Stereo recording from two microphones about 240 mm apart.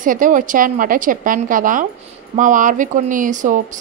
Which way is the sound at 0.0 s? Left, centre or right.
Right.